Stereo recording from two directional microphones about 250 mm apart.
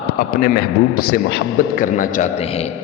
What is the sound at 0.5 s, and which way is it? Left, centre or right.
A man's voice, left.